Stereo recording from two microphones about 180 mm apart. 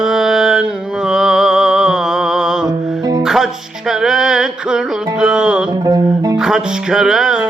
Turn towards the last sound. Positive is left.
turn(degrees=-5)  # may be behind; listen again after turning